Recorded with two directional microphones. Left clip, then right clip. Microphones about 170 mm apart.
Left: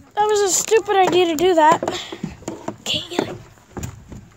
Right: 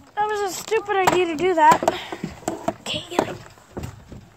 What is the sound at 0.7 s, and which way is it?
Speech, 45° left (ahead or behind).